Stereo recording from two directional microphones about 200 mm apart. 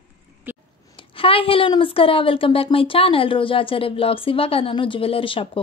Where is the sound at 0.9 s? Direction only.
25° left (ahead or behind).